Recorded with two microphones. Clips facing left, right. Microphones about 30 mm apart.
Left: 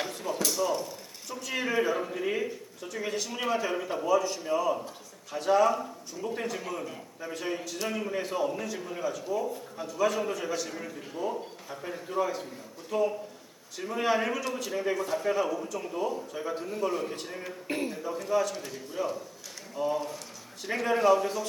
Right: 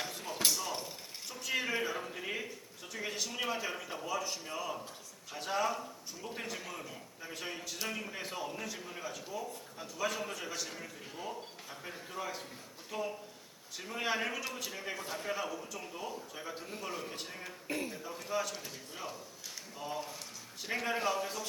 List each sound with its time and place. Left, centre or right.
0.1 s a sound: centre
0.7 s mechanisms: centre
1.3 s a man's voice: centre
4.1 s a man's voice: centre
9.4 s a man's voice: centre
9.8 s a man's voice: centre
17.7 s a man's voice: left
17.9 s a man's voice: centre